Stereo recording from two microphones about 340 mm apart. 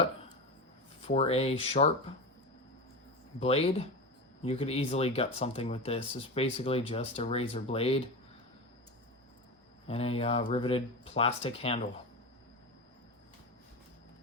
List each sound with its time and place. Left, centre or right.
1.0 s speech: centre
3.4 s speech: centre
9.8 s speech: centre